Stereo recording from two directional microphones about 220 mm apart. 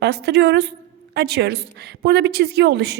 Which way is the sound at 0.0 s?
50° right (ahead or behind).